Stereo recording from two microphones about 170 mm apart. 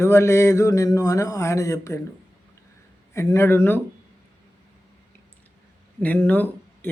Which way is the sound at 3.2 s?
15° left (ahead or behind).